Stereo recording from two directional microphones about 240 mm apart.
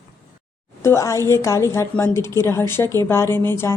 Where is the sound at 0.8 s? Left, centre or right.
Centre.